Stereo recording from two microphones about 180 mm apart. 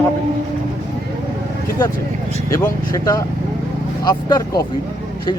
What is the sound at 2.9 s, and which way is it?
Speech, 20° left (ahead or behind).